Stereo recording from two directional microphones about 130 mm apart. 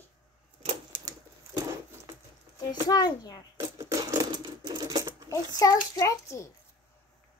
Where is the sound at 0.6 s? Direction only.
40° right (ahead or behind).